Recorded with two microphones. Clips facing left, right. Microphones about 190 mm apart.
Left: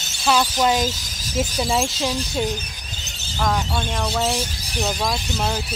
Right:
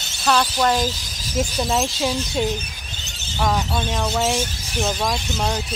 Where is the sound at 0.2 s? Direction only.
10° left (ahead or behind).